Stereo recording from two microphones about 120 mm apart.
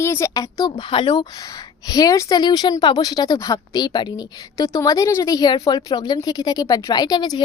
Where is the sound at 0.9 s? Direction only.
40° left (ahead or behind).